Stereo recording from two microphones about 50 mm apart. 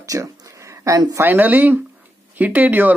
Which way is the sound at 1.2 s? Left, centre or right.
Right.